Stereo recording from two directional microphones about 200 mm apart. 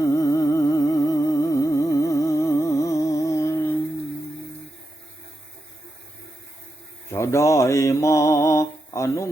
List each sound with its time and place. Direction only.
0.0 s humming: 15° left (ahead or behind)
7.1 s mantra: 15° left (ahead or behind)